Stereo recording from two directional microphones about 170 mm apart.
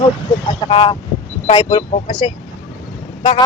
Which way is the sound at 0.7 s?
35° left (ahead or behind).